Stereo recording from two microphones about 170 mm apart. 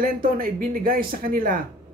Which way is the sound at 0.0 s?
55° right (ahead or behind).